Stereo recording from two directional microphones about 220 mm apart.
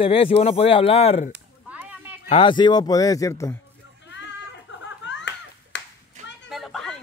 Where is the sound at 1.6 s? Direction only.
5° right (ahead or behind).